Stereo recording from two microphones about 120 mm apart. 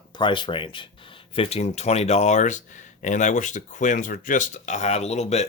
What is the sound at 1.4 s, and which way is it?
Speech, 60° left (ahead or behind).